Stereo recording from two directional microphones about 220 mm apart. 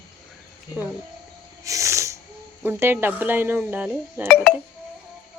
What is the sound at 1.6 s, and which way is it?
Snort, 15° right (ahead or behind).